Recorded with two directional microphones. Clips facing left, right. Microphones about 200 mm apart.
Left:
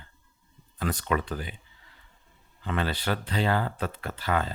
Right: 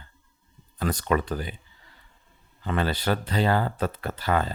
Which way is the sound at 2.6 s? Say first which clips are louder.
Right 3 dB; 40° right (ahead or behind).